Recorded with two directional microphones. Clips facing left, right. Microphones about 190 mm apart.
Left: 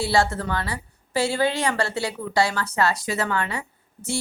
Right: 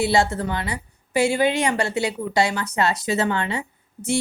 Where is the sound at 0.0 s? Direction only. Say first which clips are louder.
Right 2 dB; 20° right (ahead or behind).